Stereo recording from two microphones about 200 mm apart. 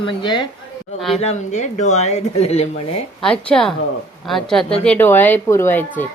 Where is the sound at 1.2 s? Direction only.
35° left (ahead or behind).